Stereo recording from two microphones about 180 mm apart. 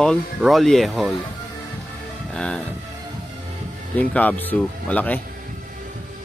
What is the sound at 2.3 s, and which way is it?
Speech, 5° left (ahead or behind).